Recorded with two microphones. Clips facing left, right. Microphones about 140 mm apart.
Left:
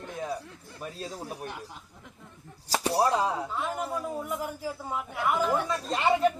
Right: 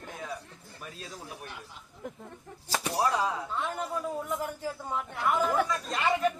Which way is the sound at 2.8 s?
30° left (ahead or behind).